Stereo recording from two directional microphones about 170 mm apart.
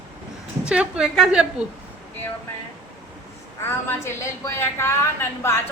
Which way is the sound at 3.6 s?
15° left (ahead or behind).